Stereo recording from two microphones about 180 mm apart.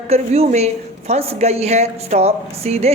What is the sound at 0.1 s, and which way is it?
A woman's voice, 35° right (ahead or behind).